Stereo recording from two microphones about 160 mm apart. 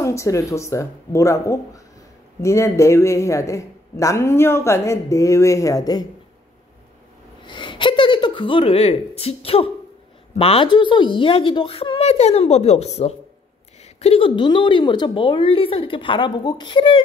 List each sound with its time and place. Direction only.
0.0 s a man's voice: 20° left (ahead or behind)
7.4 s a woman's voice: 30° left (ahead or behind)